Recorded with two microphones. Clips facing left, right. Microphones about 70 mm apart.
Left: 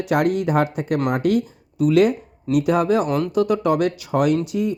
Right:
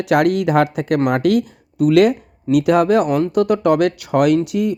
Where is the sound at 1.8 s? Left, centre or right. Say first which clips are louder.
Right 3 dB; right.